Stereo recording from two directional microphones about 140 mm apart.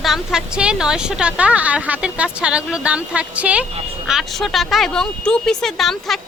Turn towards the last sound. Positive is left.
turn(degrees=0)  # may be behind; listen again after turning